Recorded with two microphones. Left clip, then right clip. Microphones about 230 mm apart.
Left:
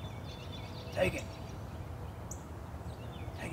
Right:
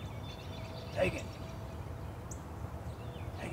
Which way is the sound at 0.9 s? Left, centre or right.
Left.